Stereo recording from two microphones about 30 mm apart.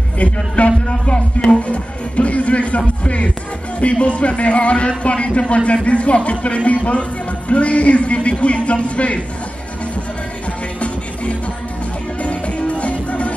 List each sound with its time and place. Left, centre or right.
0.7 s a man's voice: left
12.2 s music: left